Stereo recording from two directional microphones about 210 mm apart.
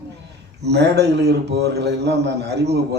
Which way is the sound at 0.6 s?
55° right (ahead or behind).